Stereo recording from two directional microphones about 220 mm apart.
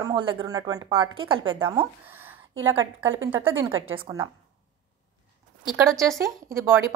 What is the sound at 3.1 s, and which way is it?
Speech, 65° right (ahead or behind).